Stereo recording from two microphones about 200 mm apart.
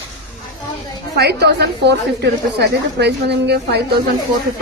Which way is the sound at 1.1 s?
55° right (ahead or behind).